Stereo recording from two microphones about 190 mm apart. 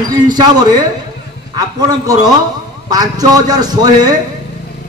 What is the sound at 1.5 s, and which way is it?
A man's voice, 20° right (ahead or behind).